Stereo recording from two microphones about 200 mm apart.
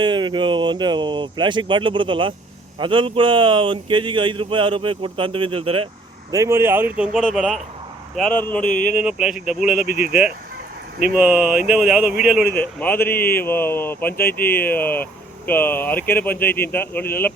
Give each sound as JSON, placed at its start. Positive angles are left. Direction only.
{"t": 0.0, "sound": "speech", "side_deg": -25}
{"t": 6.3, "sound": "a man's voice", "side_deg": -15}
{"t": 9.0, "sound": "a man's voice", "side_deg": -5}
{"t": 11.2, "sound": "a man's voice", "side_deg": -10}
{"t": 12.8, "sound": "speech", "side_deg": 10}